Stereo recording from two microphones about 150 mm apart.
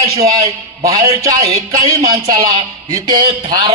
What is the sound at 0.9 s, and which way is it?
Speech, 25° right (ahead or behind).